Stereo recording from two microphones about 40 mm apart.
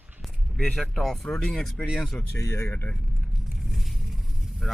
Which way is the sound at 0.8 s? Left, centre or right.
Centre.